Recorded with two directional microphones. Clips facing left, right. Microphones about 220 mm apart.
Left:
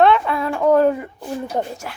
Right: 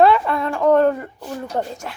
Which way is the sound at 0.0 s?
Centre (ahead or behind).